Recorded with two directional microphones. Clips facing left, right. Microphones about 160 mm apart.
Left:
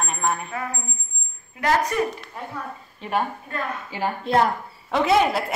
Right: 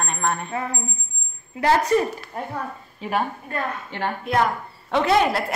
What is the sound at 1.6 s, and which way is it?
Speech, 30° right (ahead or behind).